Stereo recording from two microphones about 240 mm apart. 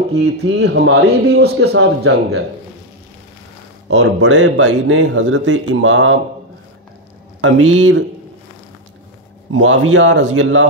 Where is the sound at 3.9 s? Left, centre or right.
Right.